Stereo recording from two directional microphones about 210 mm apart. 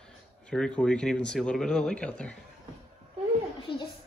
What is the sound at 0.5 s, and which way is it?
Speech, 5° left (ahead or behind).